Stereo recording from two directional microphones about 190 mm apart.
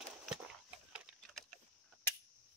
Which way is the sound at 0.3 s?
5° right (ahead or behind).